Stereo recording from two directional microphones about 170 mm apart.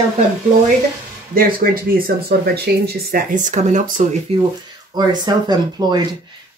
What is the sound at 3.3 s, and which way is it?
Speech, 45° right (ahead or behind).